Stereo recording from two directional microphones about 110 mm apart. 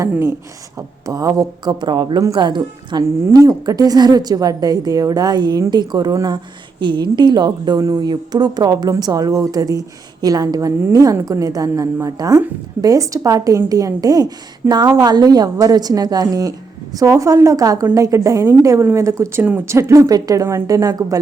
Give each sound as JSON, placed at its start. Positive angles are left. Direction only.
{"t": 0.0, "sound": "a woman's voice", "side_deg": -25}
{"t": 3.0, "sound": "a woman's voice", "side_deg": -30}
{"t": 10.8, "sound": "a woman's voice", "side_deg": -20}
{"t": 11.0, "sound": "a woman's voice", "side_deg": -35}